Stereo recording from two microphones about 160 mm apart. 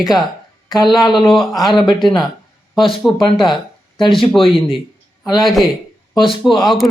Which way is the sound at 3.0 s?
Centre (ahead or behind).